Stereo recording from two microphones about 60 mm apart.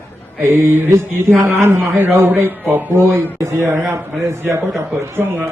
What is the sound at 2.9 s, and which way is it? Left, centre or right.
Mantra, right.